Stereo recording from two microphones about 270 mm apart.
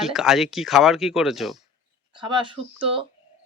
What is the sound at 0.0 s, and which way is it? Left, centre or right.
Speech, centre.